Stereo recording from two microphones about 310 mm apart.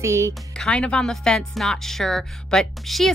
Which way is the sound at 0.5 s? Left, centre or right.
Centre.